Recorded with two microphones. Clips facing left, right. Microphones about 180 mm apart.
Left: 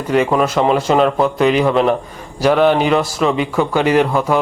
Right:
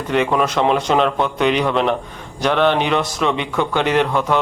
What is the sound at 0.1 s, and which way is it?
A man's voice, 5° left (ahead or behind).